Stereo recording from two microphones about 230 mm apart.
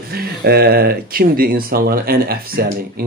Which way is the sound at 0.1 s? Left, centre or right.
Right.